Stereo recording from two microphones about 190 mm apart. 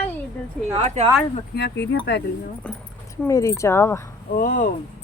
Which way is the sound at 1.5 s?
65° left (ahead or behind).